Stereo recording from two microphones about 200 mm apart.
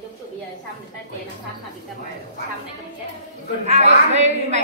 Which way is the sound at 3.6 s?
35° right (ahead or behind).